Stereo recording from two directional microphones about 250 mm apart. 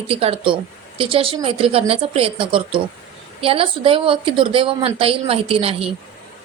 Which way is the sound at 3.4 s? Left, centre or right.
Right.